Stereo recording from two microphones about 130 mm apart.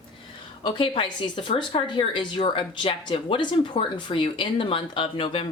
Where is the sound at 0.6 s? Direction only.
40° left (ahead or behind).